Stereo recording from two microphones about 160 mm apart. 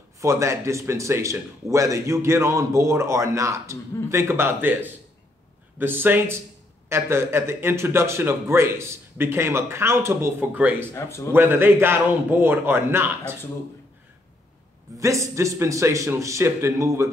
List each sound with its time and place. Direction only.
0.2 s speech: 20° right (ahead or behind)
10.9 s speech: 15° left (ahead or behind)
11.3 s speech: 15° right (ahead or behind)
15.0 s a man's voice: 20° right (ahead or behind)